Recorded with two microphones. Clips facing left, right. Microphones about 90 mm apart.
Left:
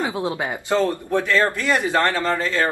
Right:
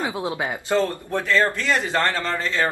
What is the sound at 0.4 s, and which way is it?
A man's voice, 20° left (ahead or behind).